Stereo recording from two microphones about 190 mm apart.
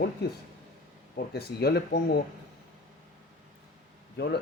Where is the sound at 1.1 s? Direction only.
55° left (ahead or behind).